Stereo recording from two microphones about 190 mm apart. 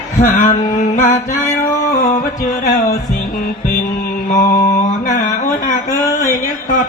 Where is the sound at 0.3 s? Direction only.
45° left (ahead or behind).